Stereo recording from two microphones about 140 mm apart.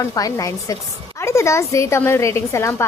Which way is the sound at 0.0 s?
25° left (ahead or behind).